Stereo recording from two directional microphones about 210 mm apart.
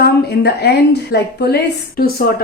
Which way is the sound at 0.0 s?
50° left (ahead or behind).